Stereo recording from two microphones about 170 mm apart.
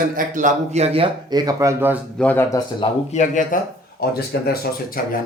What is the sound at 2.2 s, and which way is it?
Speech, 10° left (ahead or behind).